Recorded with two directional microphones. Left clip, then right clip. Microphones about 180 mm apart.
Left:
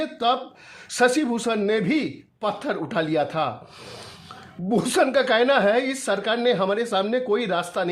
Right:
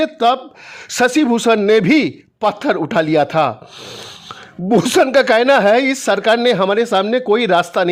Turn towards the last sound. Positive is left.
turn(degrees=-35)  # may be behind; listen again after turning